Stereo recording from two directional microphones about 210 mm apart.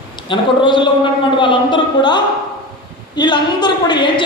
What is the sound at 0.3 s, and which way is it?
A woman's voice, 20° left (ahead or behind).